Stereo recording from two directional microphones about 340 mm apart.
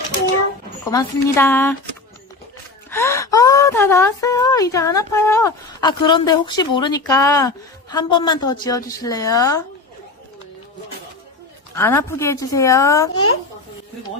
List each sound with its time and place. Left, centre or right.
0.8 s speech: centre
2.9 s speech: centre
11.7 s speech: centre